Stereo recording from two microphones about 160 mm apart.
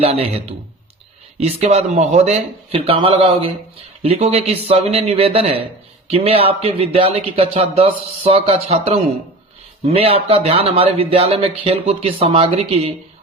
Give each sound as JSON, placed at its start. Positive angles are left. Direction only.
{"t": 0.0, "sound": "speech", "side_deg": -40}